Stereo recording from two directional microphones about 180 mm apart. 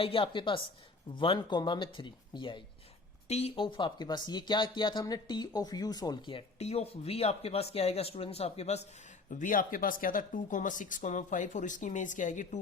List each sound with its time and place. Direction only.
0.0 s speech: 30° left (ahead or behind)
9.3 s speech: 50° left (ahead or behind)